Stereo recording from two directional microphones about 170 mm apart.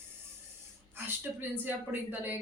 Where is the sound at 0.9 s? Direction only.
10° right (ahead or behind).